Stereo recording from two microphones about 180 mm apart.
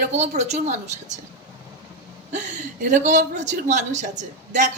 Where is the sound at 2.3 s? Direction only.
40° right (ahead or behind).